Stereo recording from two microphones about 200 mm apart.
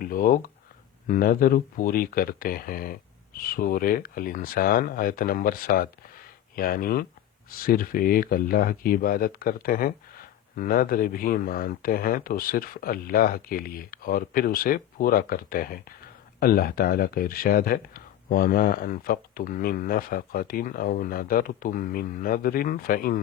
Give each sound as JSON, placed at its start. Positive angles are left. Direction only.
{"t": 0.0, "sound": "speech", "side_deg": 45}